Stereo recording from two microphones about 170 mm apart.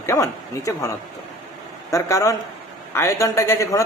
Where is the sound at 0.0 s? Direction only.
20° left (ahead or behind).